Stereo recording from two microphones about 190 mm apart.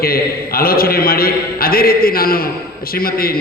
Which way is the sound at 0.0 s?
50° left (ahead or behind).